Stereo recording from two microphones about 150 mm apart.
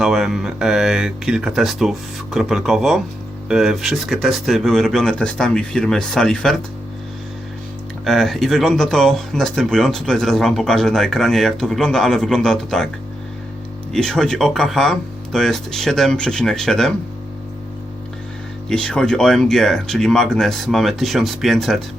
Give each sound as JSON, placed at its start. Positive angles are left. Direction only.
{"t": 0.0, "sound": "speech", "side_deg": -5}
{"t": 8.0, "sound": "speech", "side_deg": 0}
{"t": 13.9, "sound": "speech", "side_deg": 5}
{"t": 18.7, "sound": "speech", "side_deg": 5}